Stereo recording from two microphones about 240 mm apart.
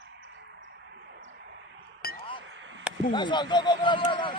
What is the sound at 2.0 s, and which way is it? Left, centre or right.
Chink, left.